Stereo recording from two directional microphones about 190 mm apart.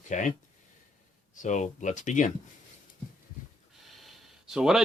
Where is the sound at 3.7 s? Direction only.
Centre (ahead or behind).